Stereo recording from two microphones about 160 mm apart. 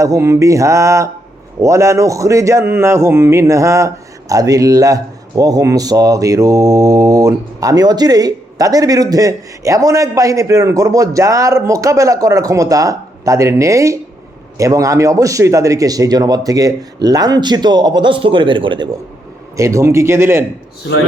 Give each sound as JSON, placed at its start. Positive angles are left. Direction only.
{"t": 0.0, "sound": "speech", "side_deg": -20}
{"t": 19.5, "sound": "a man's voice", "side_deg": -20}